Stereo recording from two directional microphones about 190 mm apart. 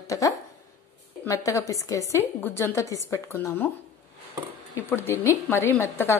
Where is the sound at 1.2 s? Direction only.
15° left (ahead or behind).